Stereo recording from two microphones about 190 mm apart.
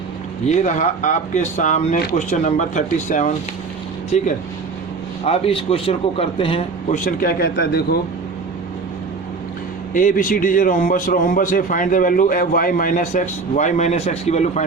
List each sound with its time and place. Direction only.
0.4 s a man's voice: 40° left (ahead or behind)
5.2 s a man's voice: 30° left (ahead or behind); by 7.9 s 55° left (ahead or behind)
9.9 s a man's voice: 45° left (ahead or behind)